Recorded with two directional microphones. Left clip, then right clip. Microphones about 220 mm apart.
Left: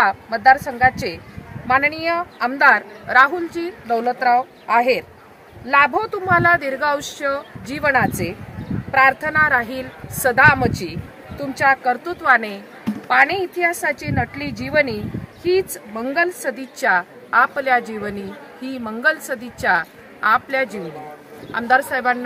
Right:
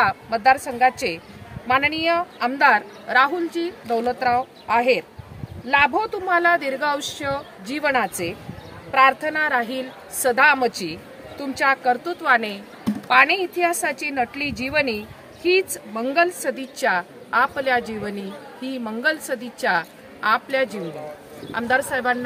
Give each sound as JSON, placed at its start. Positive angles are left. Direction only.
{"t": 0.0, "sound": "a woman's voice", "side_deg": -20}
{"t": 15.7, "sound": "a woman's voice", "side_deg": -15}